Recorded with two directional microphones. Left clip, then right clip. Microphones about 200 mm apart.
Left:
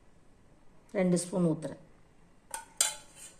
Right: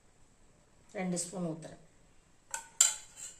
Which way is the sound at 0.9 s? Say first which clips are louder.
Left 8 dB; 45° left (ahead or behind).